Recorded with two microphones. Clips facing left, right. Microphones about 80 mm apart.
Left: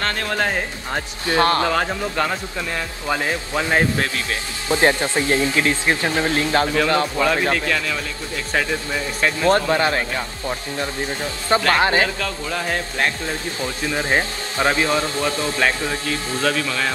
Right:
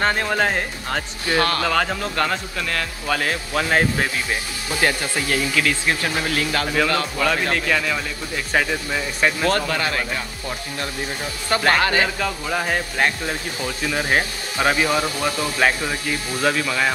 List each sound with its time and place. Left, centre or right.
0.0 s speech: centre
1.2 s speech: left
1.7 s a man's voice: centre
4.6 s speech: left
7.2 s a man's voice: centre
8.5 s speech: centre
9.5 s speech: left
11.7 s speech: left
12.2 s speech: centre